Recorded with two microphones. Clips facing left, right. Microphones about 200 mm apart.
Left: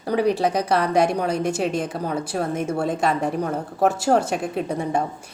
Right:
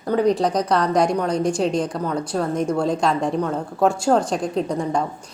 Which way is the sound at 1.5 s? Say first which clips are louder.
Right 3 dB; 5° left (ahead or behind).